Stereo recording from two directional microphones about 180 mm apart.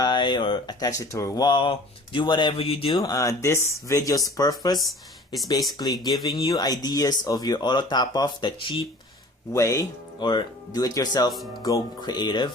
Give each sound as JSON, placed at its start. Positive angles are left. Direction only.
{"t": 0.0, "sound": "speech", "side_deg": 25}
{"t": 3.0, "sound": "speech", "side_deg": 20}
{"t": 4.8, "sound": "speech", "side_deg": 0}
{"t": 5.5, "sound": "speech", "side_deg": 20}
{"t": 11.3, "sound": "speech", "side_deg": 0}
{"t": 11.6, "sound": "speech", "side_deg": 20}